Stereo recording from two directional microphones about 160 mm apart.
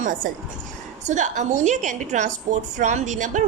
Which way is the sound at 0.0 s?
55° right (ahead or behind).